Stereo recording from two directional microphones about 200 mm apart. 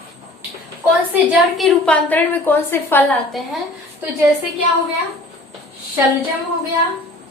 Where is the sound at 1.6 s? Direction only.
5° left (ahead or behind).